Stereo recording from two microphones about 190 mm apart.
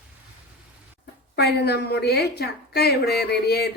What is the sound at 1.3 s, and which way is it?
A woman's voice, 60° left (ahead or behind).